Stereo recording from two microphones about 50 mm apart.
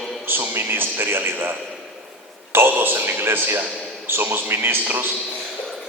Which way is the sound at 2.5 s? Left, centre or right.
Right.